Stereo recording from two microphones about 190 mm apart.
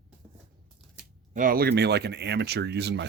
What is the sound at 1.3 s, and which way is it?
Speech, 50° right (ahead or behind).